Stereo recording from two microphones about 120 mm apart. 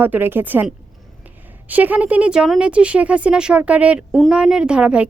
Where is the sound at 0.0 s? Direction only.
15° right (ahead or behind).